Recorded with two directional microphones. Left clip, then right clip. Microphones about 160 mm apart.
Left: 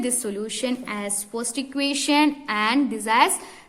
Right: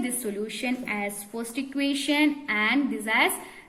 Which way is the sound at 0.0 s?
40° left (ahead or behind).